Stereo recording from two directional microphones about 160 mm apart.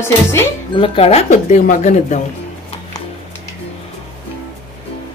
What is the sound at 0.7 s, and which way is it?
Speech, 35° left (ahead or behind).